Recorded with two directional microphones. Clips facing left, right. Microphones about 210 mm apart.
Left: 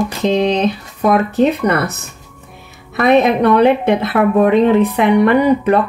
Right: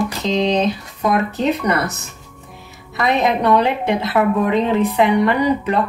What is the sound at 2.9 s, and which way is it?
A woman's voice, 55° left (ahead or behind).